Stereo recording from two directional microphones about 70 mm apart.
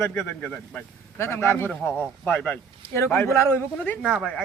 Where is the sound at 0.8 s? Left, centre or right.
Left.